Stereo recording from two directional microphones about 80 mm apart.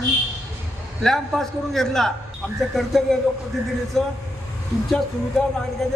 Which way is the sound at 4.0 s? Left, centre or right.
Centre.